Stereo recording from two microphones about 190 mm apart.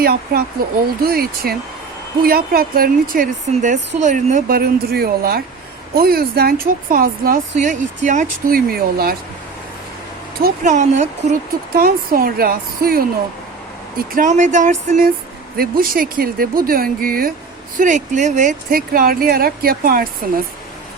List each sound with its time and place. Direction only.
0.0 s speech: 55° right (ahead or behind)
10.4 s speech: 40° right (ahead or behind)
14.1 s speech: 40° right (ahead or behind)